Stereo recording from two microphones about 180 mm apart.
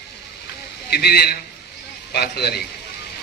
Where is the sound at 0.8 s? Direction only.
65° left (ahead or behind).